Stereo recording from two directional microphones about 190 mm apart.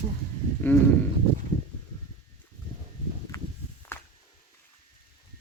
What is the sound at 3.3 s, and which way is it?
Walk, 20° left (ahead or behind).